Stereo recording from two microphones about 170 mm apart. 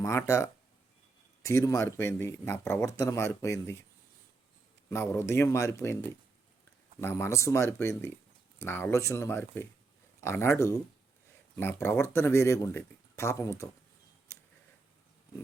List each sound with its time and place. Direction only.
0.0 s speech: 15° left (ahead or behind)
4.9 s speech: 15° left (ahead or behind)